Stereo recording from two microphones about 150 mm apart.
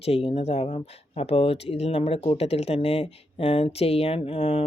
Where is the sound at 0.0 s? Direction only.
40° left (ahead or behind).